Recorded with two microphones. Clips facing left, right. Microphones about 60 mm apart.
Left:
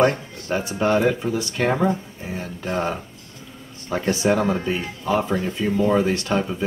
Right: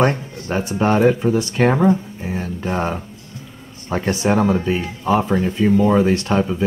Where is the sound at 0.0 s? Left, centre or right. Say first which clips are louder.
Right 1 dB; right.